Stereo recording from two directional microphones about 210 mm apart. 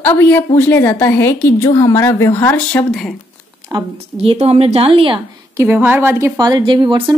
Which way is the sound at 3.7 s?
25° right (ahead or behind).